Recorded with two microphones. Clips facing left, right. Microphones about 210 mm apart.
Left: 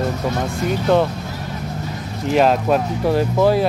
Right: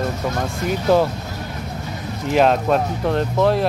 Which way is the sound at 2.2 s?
Centre (ahead or behind).